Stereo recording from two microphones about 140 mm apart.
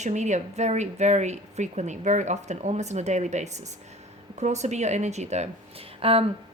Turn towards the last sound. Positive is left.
turn(degrees=-45)  # may be behind; listen again after turning